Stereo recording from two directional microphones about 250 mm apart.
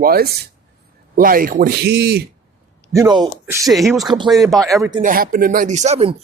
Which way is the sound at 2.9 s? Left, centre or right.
Centre.